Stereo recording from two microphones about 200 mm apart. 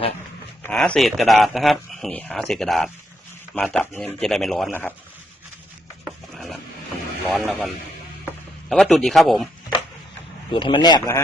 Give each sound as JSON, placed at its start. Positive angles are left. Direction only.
{"t": 0.6, "sound": "speech", "side_deg": 5}
{"t": 6.3, "sound": "printer", "side_deg": 0}
{"t": 7.3, "sound": "speech", "side_deg": 10}
{"t": 8.7, "sound": "speech", "side_deg": 0}
{"t": 10.5, "sound": "speech", "side_deg": 25}